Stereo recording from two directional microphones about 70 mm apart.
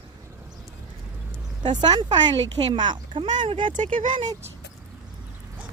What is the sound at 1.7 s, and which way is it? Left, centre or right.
Speech, right.